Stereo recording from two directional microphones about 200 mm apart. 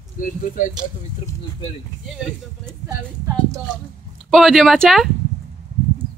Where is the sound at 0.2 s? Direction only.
40° left (ahead or behind).